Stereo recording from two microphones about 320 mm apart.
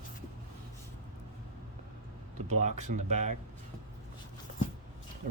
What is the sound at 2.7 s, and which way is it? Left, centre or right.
Speech, right.